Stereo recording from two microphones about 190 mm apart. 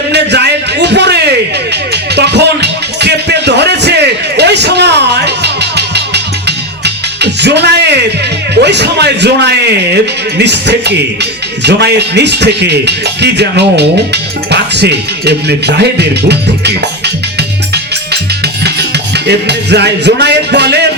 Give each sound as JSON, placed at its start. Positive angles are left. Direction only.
{"t": 0.1, "sound": "a sound", "side_deg": -60}
{"t": 1.7, "sound": "music", "side_deg": -60}
{"t": 8.5, "sound": "a man's voice", "side_deg": -65}
{"t": 18.1, "sound": "music", "side_deg": -60}